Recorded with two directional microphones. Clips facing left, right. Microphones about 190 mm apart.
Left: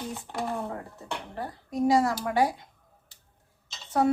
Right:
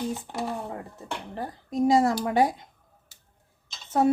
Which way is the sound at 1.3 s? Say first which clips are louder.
Right 3 dB; 25° right (ahead or behind).